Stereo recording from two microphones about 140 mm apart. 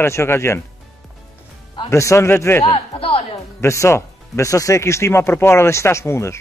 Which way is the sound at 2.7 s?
40° left (ahead or behind).